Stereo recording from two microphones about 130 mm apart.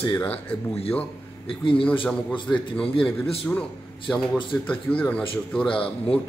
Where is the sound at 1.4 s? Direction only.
40° left (ahead or behind).